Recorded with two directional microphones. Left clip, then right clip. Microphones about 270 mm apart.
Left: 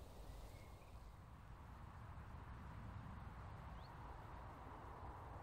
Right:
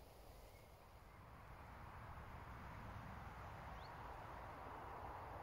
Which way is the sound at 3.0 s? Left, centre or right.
Right.